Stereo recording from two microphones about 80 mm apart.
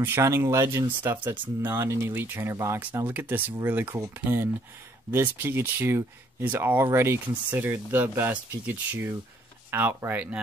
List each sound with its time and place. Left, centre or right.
0.0 s speech: right
3.1 s speech: right